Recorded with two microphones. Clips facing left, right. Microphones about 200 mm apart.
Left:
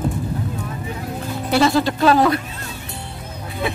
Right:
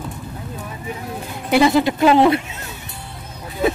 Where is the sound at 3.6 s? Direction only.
45° right (ahead or behind).